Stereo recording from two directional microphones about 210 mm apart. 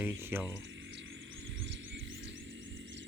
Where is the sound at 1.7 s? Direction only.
60° right (ahead or behind).